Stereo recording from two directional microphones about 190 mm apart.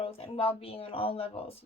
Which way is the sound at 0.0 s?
30° left (ahead or behind).